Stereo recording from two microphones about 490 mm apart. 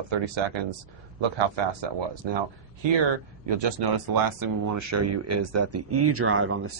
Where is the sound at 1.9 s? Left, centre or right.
Right.